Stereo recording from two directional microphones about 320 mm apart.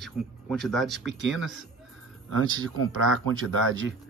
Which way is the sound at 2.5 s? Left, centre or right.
Right.